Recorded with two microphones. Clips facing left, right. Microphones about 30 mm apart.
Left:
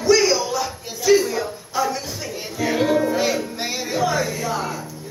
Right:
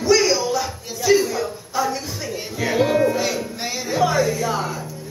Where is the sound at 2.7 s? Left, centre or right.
Centre.